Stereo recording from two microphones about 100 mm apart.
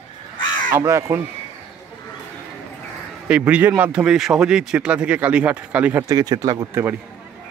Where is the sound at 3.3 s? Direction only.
15° right (ahead or behind).